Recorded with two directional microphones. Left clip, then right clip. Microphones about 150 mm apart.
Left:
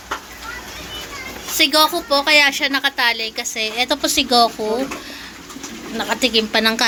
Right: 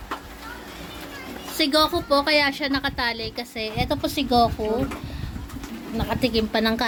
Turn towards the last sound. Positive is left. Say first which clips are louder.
# left 6 dB
turn(degrees=-10)  # may be behind; listen again after turning